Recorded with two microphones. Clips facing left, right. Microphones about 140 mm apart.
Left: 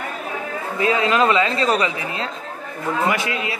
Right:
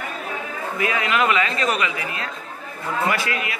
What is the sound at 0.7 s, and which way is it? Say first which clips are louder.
Speech: left 4 dB; 30° left (ahead or behind).